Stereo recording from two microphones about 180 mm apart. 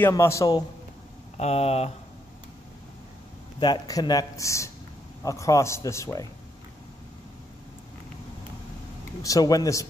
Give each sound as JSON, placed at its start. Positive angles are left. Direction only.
{"t": 0.0, "sound": "a man's voice", "side_deg": 15}
{"t": 1.4, "sound": "speech", "side_deg": 35}
{"t": 3.5, "sound": "a man's voice", "side_deg": 25}
{"t": 9.2, "sound": "speech", "side_deg": 20}